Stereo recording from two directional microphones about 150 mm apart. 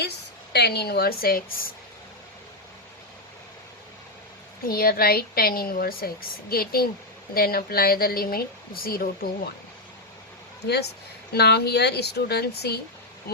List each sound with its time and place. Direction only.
0.5 s speech: 90° left; by 1.7 s 75° left (ahead or behind)
4.6 s speech: 75° left (ahead or behind)
11.3 s speech: 90° left